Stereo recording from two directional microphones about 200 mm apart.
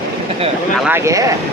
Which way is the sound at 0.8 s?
10° right (ahead or behind).